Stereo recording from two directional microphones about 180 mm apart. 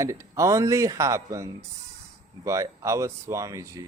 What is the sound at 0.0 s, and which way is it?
Speech, 15° right (ahead or behind).